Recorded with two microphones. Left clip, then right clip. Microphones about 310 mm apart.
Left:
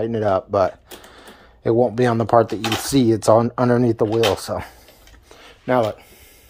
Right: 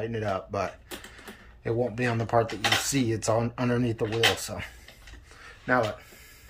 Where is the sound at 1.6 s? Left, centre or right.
Centre.